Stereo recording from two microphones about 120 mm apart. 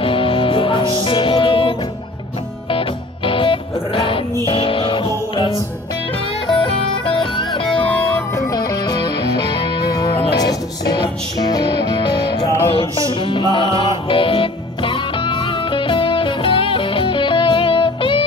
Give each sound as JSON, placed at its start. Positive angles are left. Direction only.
{"t": 0.0, "sound": "music", "side_deg": 45}
{"t": 3.3, "sound": "music", "side_deg": 45}
{"t": 7.8, "sound": "music", "side_deg": 10}
{"t": 8.5, "sound": "music", "side_deg": 35}